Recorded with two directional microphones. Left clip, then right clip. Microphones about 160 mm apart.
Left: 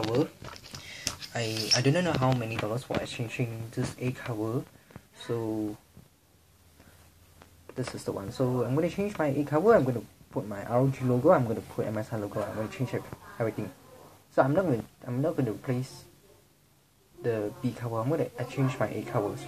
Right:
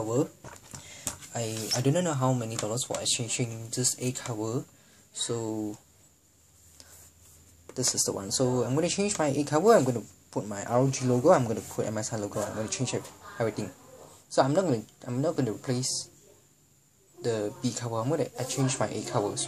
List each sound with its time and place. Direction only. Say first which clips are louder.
0.9 s speech: left 2 dB; 5° right (ahead or behind)
8.0 s speech: right 1 dB; 15° right (ahead or behind)
12.4 s a man's voice: even; 30° right (ahead or behind)
14.3 s speech: even; 10° right (ahead or behind)
17.2 s speech: even; 15° right (ahead or behind)